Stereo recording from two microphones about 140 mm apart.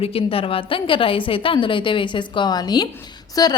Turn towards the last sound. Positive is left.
turn(degrees=25)  # may be behind; listen again after turning